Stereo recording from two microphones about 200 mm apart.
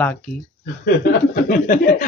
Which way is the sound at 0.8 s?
45° left (ahead or behind).